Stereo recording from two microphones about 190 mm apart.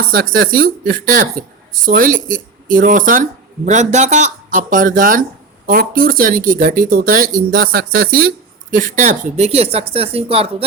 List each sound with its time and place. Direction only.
0.0 s speech: 50° right (ahead or behind); by 10.5 s 30° right (ahead or behind)